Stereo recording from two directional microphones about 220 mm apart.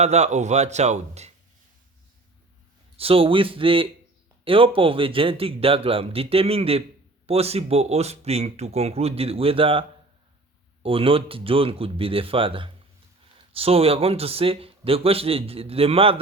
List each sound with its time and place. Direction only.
0.0 s speech: 30° right (ahead or behind)
3.0 s a man's voice: 25° right (ahead or behind)
10.8 s a man's voice: 25° right (ahead or behind)